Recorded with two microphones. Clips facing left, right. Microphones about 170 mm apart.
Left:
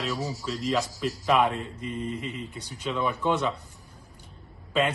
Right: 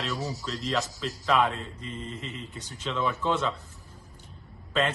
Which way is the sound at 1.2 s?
15° left (ahead or behind).